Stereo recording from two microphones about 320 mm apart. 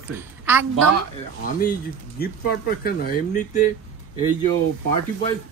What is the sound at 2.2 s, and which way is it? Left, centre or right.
Speech, left.